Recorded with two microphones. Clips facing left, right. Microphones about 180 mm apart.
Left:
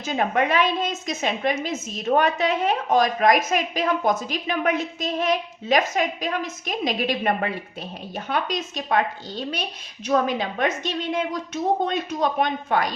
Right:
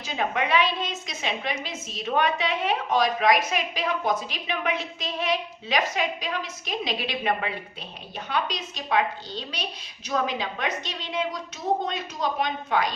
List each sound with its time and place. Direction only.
0.0 s a woman's voice: 50° left (ahead or behind)